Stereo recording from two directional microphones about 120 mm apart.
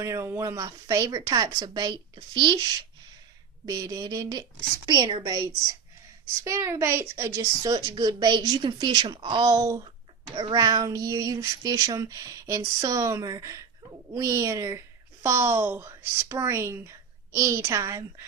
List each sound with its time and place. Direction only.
0.0 s speech: 25° right (ahead or behind)
6.4 s female singing: 25° right (ahead or behind)
7.6 s speech: 30° right (ahead or behind)
10.3 s female singing: 35° right (ahead or behind)